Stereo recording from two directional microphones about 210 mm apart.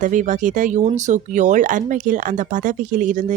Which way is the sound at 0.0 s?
35° right (ahead or behind).